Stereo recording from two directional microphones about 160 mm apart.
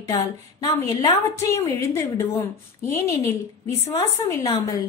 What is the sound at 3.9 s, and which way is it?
Speech, 20° left (ahead or behind).